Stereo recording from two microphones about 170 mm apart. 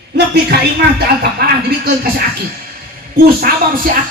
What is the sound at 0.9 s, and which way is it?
Music, 70° right (ahead or behind).